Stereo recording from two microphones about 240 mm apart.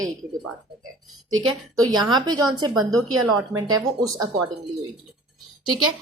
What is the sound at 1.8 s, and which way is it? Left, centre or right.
Speech, centre.